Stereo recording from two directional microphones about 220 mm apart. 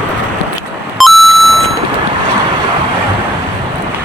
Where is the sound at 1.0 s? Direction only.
Centre (ahead or behind).